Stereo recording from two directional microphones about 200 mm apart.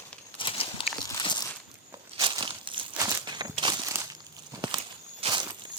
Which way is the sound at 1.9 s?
20° right (ahead or behind).